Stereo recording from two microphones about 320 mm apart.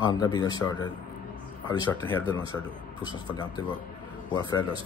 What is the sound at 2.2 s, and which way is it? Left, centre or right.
Speech, centre.